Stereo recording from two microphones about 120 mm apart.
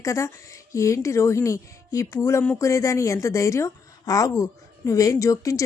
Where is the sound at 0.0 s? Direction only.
25° left (ahead or behind).